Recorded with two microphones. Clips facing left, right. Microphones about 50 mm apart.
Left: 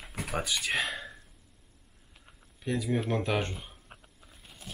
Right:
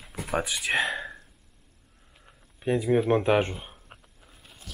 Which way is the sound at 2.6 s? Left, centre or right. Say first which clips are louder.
Right 7 dB; right.